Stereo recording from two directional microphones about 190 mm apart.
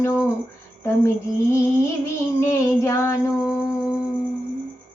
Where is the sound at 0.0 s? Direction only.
15° left (ahead or behind).